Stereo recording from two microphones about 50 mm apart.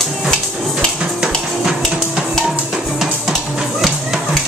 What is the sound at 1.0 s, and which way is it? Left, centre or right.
Music, centre.